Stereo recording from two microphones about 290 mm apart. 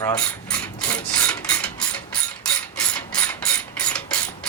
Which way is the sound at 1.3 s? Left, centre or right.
Centre.